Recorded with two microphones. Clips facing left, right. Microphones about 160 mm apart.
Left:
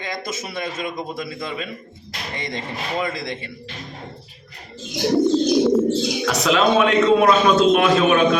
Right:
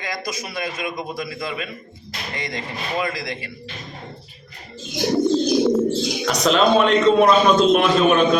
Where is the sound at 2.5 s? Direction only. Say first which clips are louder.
Left 2 dB; 25° left (ahead or behind).